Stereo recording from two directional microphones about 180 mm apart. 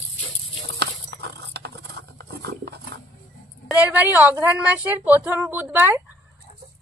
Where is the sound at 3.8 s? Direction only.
10° right (ahead or behind).